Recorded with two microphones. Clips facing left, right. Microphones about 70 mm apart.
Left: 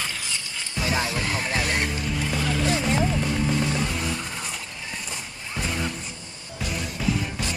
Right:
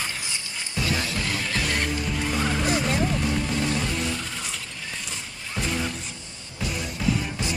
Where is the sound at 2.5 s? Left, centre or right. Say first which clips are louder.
Left 1 dB; centre.